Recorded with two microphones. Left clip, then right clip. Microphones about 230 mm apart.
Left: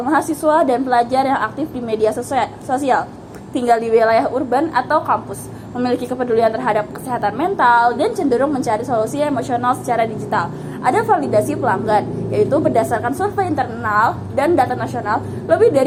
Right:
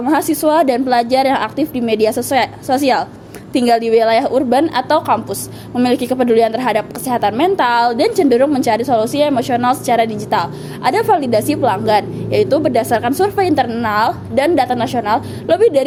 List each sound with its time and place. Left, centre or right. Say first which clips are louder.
0.0 s a woman's voice: right 2 dB; right
8.6 s a woman's voice: right 4 dB; right
8.9 s a woman's voice: right 4 dB; right